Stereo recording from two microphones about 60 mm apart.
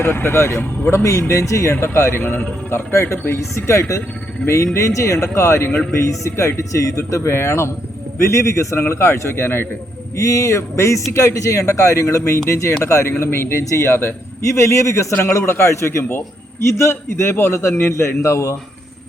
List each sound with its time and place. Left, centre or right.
0.0 s a man's voice: left
2.2 s a man's voice: left
7.3 s a man's voice: left
8.8 s a man's voice: left
10.2 s a man's voice: left
14.5 s a man's voice: left